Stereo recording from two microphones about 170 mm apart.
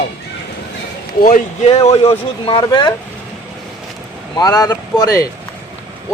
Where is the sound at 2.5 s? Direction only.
25° left (ahead or behind).